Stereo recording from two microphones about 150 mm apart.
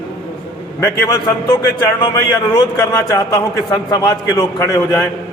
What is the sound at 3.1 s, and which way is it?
A man's voice, 30° left (ahead or behind).